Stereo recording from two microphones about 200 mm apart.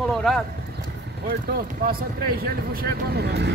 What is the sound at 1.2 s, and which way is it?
Speech, 45° right (ahead or behind).